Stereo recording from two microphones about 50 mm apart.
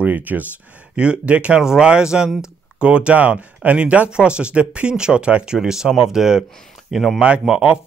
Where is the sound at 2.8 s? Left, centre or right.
Right; by 7.2 s centre.